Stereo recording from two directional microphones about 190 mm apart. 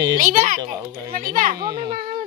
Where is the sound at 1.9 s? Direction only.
45° right (ahead or behind).